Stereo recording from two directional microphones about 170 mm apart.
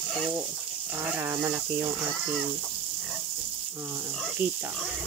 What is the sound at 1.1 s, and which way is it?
Speech, 15° right (ahead or behind).